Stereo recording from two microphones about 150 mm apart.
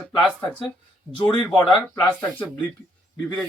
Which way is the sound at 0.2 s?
5° left (ahead or behind).